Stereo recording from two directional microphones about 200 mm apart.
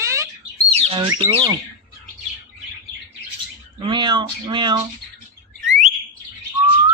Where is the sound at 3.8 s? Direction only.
20° right (ahead or behind).